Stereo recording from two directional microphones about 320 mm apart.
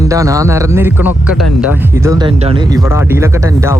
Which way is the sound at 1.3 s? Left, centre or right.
Left.